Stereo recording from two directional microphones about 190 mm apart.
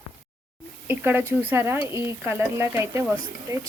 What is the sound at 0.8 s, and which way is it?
Speech, 10° right (ahead or behind).